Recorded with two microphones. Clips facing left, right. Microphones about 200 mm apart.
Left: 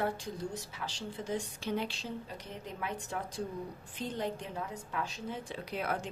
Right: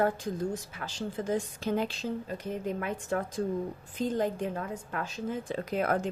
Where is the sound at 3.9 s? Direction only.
45° right (ahead or behind).